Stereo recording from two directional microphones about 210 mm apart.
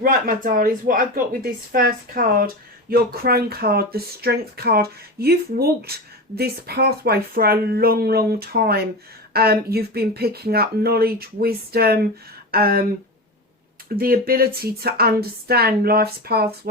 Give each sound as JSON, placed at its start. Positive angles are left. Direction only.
{"t": 0.0, "sound": "speech", "side_deg": -40}
{"t": 13.9, "sound": "speech", "side_deg": -45}